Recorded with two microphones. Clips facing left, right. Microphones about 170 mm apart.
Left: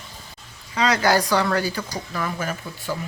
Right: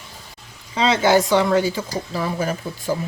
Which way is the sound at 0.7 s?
25° right (ahead or behind).